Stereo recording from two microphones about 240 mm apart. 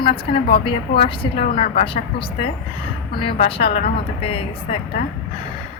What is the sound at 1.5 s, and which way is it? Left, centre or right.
Speech, left.